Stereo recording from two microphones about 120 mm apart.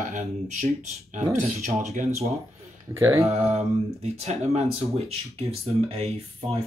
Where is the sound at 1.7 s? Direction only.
75° right (ahead or behind).